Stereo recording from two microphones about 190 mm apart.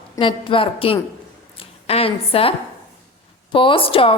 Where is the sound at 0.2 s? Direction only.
25° left (ahead or behind).